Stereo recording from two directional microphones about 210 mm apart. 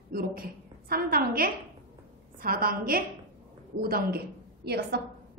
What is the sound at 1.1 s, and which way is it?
A woman's voice, 45° right (ahead or behind).